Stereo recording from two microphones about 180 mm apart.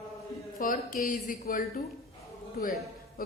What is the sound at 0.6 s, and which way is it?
Speech, 50° left (ahead or behind).